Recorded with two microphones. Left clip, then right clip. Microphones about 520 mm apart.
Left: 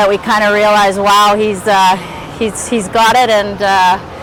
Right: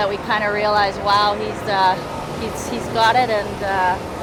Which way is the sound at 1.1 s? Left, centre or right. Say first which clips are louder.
Left 8 dB; left.